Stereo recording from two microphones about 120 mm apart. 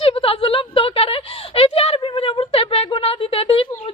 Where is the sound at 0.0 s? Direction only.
50° left (ahead or behind).